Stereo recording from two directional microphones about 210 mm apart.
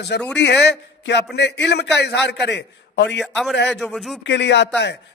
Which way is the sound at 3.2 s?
Centre (ahead or behind).